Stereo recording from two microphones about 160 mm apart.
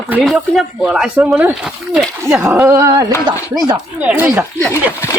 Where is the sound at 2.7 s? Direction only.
20° right (ahead or behind).